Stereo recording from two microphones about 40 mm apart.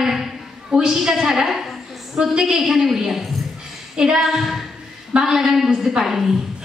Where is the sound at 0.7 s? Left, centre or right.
Right.